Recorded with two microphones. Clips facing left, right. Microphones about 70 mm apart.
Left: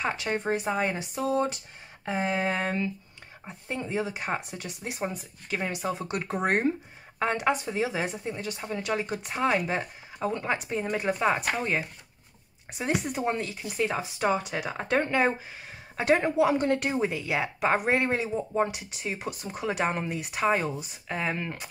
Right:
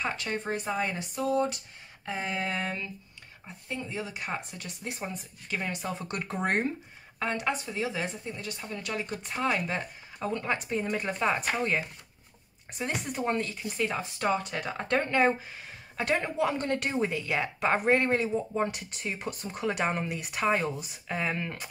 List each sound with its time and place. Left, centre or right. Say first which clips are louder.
0.0 s a woman's voice: left 3 dB; centre
4.4 s a woman's voice: left 3 dB; centre
7.2 s a woman's voice: left 4 dB; left; by 15.3 s centre
16.0 s a woman's voice: left 5 dB; centre